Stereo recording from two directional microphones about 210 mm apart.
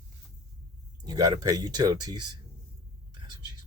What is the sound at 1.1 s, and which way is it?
Speech, 20° right (ahead or behind).